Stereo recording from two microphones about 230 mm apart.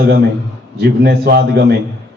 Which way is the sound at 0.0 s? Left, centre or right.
Right.